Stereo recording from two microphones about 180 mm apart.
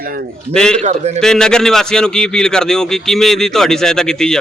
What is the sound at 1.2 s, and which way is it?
A man's voice, 5° left (ahead or behind).